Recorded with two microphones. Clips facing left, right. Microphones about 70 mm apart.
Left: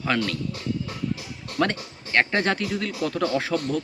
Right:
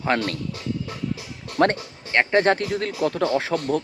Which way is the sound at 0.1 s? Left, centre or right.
Right.